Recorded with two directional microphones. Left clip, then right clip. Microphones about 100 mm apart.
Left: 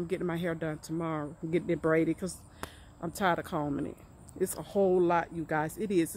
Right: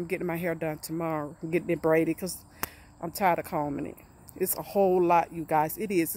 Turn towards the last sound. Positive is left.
turn(degrees=-10)  # may be behind; listen again after turning